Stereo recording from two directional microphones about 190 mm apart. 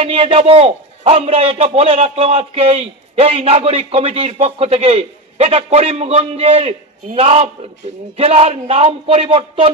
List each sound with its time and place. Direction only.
0.0 s a man's voice: 30° right (ahead or behind)